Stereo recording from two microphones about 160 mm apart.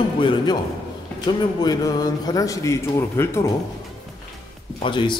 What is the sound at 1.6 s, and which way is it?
A man's voice, 25° left (ahead or behind).